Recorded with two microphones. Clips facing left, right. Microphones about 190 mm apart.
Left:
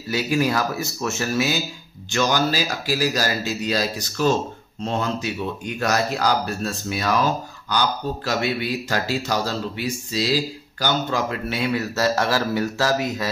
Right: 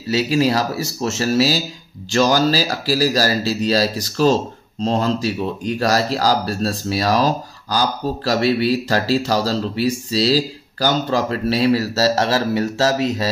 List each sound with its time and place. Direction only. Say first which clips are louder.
0.1 s speech: right 4 dB; 30° right (ahead or behind)